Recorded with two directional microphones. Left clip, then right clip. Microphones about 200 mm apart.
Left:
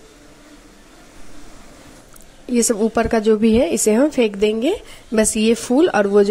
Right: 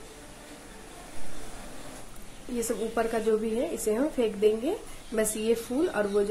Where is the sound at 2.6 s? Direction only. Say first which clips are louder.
Left 11 dB; 40° left (ahead or behind).